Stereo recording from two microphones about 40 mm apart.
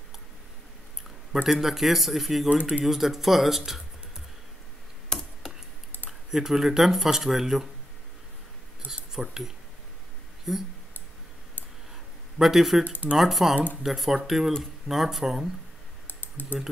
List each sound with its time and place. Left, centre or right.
1.3 s speech: centre
2.5 s speech: right
2.8 s speech: centre
5.1 s a sound: left
6.0 s speech: centre
8.8 s speech: centre
12.4 s speech: centre
16.1 s typing: left